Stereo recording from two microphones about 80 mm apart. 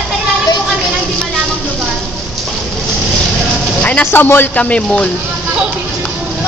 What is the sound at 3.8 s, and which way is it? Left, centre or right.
Speech, left.